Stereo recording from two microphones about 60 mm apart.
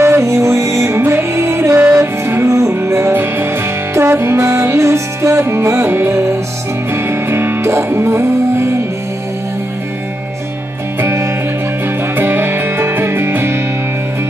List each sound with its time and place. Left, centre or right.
0.0 s music: right
11.0 s music: right